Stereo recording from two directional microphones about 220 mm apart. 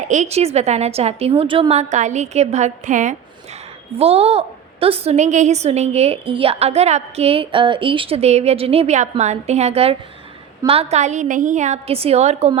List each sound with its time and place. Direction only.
0.1 s a woman's voice: 30° right (ahead or behind)